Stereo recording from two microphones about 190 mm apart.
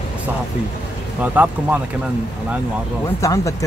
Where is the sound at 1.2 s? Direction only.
10° right (ahead or behind).